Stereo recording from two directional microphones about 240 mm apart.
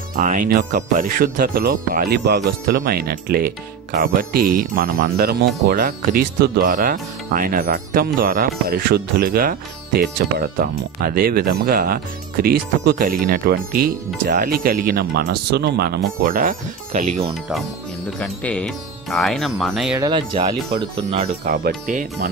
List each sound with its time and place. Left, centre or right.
0.1 s speech: right
17.1 s speech: centre
20.0 s speech: centre
21.5 s speech: right